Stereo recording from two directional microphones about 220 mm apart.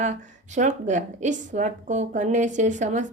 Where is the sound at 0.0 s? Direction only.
35° right (ahead or behind).